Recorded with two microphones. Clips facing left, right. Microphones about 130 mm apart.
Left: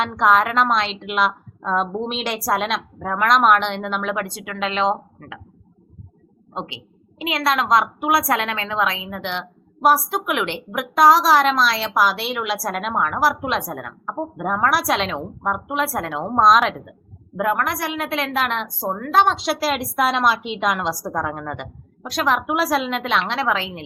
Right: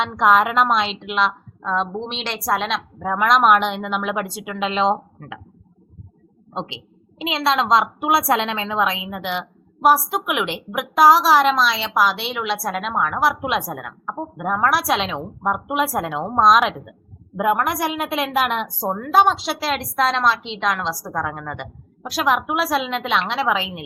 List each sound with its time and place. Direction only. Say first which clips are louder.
0.0 s a woman's voice: right 1 dB; centre (ahead or behind)
6.5 s a woman's voice: right 1 dB; 30° right (ahead or behind)
8.7 s a woman's voice: right 1 dB; 5° right (ahead or behind)